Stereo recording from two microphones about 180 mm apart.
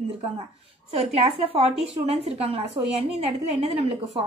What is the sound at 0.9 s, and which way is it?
A woman's voice, 35° right (ahead or behind).